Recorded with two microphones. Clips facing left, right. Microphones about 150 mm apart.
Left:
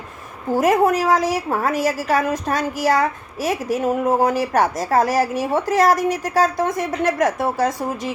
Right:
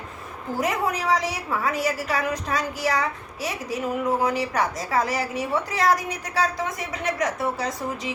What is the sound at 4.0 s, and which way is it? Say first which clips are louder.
A woman's voice: left 3 dB; 45° left (ahead or behind).